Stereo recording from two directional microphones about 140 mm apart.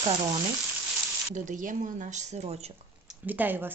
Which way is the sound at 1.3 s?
65° right (ahead or behind).